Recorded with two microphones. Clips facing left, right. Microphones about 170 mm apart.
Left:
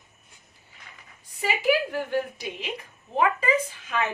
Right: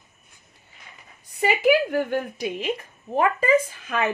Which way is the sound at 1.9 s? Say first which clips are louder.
Right 3 dB; 55° right (ahead or behind).